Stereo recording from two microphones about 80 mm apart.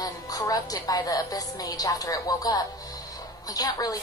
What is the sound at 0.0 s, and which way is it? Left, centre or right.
A woman's voice, left.